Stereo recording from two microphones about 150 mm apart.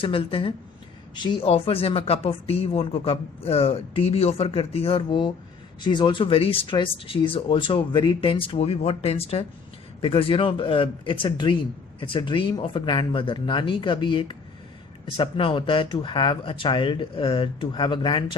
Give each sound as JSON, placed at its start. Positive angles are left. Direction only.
{"t": 0.0, "sound": "speech", "side_deg": 35}
{"t": 1.5, "sound": "speech", "side_deg": 40}